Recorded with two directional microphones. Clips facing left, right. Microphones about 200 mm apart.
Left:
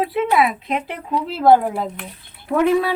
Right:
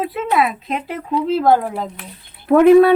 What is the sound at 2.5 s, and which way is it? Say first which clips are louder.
Speech: right 8 dB; 55° right (ahead or behind).